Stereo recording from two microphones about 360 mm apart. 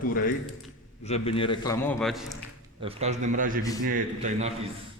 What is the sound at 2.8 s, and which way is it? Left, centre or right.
A man's voice, centre.